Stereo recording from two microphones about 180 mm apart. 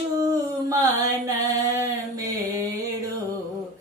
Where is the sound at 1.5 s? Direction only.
20° right (ahead or behind).